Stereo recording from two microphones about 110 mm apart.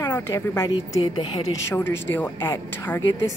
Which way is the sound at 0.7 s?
40° left (ahead or behind).